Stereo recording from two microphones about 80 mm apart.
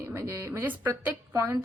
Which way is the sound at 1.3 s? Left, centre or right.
Right.